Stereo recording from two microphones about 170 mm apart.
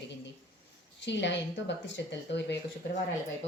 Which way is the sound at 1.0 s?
90° left.